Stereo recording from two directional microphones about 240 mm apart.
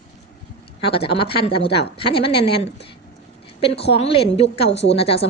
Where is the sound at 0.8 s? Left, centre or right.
Left.